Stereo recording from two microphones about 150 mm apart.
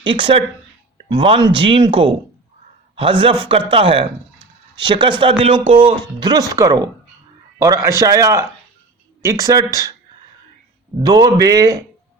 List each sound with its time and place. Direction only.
0.0 s a man's voice: 35° right (ahead or behind)
11.0 s a man's voice: 25° right (ahead or behind)